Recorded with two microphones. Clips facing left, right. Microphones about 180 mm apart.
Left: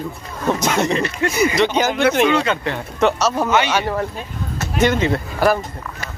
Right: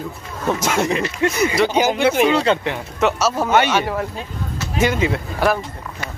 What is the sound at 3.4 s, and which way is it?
Speech, 55° right (ahead or behind).